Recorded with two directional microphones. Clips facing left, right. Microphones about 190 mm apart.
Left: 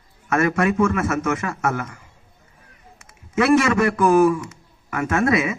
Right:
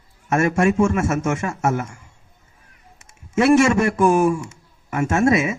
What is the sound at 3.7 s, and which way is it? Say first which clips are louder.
A man's voice: even; 25° right (ahead or behind).